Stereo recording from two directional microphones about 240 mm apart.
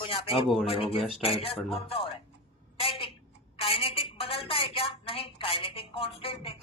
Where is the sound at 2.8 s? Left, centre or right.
Left.